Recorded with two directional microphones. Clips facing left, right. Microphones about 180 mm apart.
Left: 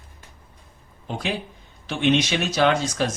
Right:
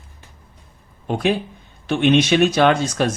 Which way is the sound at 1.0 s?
55° right (ahead or behind).